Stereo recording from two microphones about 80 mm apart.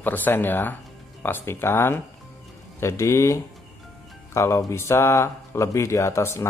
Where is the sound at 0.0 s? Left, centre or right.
Left.